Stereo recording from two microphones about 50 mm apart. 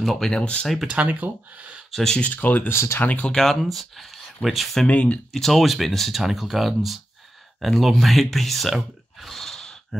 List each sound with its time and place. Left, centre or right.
0.0 s speech: centre
0.3 s speech: centre
0.8 s speech: right
1.9 s speech: centre
2.1 s speech: left
2.7 s speech: left
3.0 s speech: left
3.3 s speech: centre
4.8 s speech: left
5.3 s speech: centre